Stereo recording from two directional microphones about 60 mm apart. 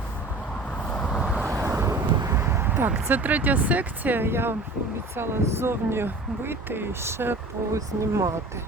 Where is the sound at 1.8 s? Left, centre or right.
Right.